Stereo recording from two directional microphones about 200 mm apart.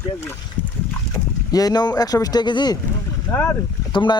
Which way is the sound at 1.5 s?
20° left (ahead or behind).